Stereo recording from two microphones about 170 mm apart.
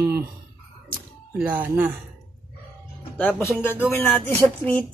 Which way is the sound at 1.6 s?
10° right (ahead or behind).